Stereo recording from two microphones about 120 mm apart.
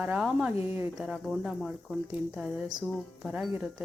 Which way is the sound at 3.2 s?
Centre (ahead or behind).